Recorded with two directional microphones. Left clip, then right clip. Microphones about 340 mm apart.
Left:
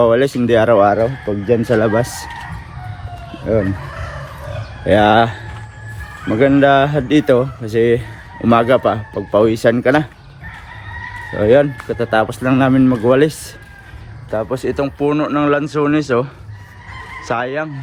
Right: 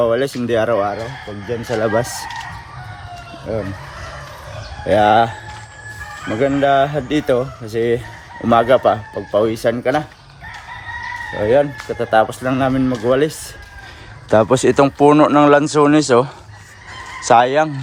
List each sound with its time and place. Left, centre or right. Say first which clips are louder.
0.0 s speech: left 4 dB; centre
3.5 s speech: left 7 dB; centre
4.9 s speech: left 1 dB; centre
11.3 s speech: left 3 dB; centre
14.3 s speech: right 7 dB; right; by 17.7 s centre